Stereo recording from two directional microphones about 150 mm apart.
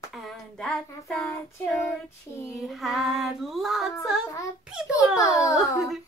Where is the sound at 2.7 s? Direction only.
Centre (ahead or behind).